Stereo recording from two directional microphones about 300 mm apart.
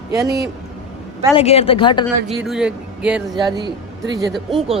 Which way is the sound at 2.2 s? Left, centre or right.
Centre.